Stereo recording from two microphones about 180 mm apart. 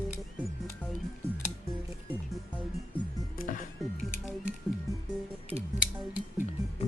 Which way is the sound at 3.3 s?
50° left (ahead or behind).